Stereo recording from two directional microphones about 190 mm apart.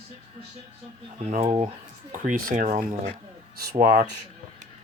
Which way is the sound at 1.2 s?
35° right (ahead or behind).